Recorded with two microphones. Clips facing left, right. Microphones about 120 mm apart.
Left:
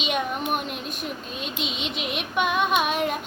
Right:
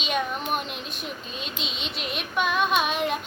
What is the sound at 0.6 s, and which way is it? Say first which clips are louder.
Speech: left 3 dB; 50° left (ahead or behind).